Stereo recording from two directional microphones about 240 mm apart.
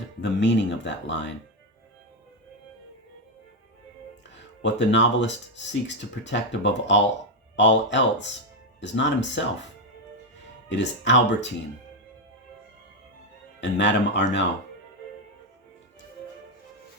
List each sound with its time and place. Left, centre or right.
0.2 s speech: left
4.6 s speech: left
10.7 s speech: left
13.6 s speech: left